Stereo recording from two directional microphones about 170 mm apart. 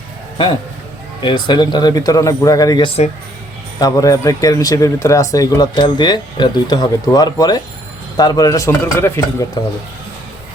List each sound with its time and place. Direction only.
1.2 s a man's voice: 25° left (ahead or behind)
3.8 s a man's voice: 20° left (ahead or behind)